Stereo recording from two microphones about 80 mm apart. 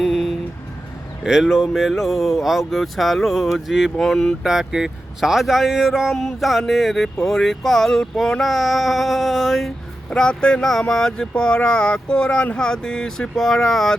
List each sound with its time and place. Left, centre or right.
0.0 s vehicle: centre
1.2 s speech: centre